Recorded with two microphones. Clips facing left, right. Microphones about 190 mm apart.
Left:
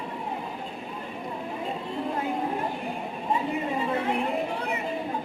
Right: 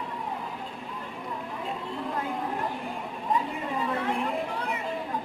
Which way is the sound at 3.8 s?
25° left (ahead or behind).